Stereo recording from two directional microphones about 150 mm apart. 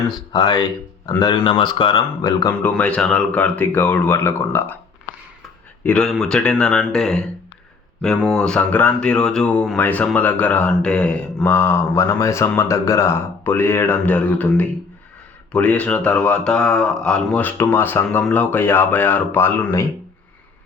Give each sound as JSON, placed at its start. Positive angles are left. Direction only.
{"t": 0.1, "sound": "speech", "side_deg": 25}
{"t": 2.6, "sound": "speech", "side_deg": 10}
{"t": 5.8, "sound": "speech", "side_deg": 5}